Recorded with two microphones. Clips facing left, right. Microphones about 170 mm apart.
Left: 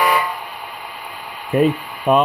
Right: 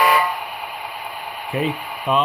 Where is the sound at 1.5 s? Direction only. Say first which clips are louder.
Left 7 dB; 45° left (ahead or behind).